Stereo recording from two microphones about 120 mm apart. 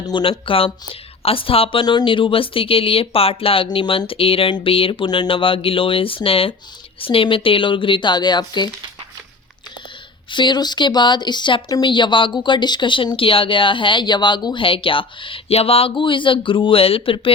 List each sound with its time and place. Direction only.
0.0 s speech: 45° left (ahead or behind)
10.3 s speech: 40° left (ahead or behind)